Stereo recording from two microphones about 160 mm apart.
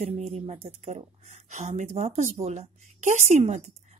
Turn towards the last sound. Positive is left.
turn(degrees=-45)  # may be behind; listen again after turning